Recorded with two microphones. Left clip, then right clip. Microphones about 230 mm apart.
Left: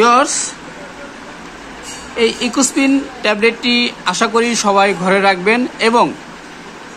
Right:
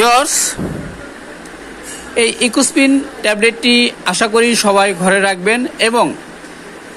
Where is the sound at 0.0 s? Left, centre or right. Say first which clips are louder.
Even; right.